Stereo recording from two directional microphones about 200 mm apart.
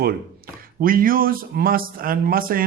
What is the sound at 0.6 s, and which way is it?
Speech, 45° right (ahead or behind).